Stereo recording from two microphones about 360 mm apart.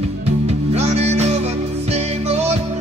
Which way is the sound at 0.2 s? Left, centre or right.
Centre.